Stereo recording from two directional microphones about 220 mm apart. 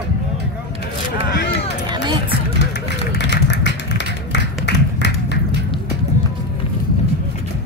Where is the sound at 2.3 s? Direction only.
50° left (ahead or behind).